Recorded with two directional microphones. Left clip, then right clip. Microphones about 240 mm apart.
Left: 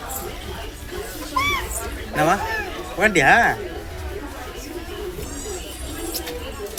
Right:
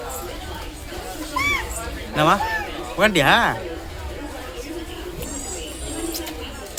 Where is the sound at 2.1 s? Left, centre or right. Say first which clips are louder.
Right 1 dB; centre.